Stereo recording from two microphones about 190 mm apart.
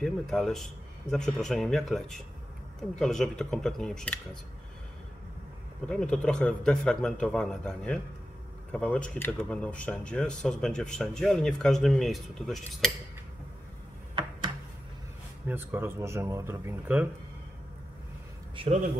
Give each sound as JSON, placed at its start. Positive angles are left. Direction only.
{"t": 0.0, "sound": "speech", "side_deg": 0}
{"t": 5.9, "sound": "speech", "side_deg": 5}
{"t": 15.4, "sound": "speech", "side_deg": -10}
{"t": 18.6, "sound": "speech", "side_deg": -35}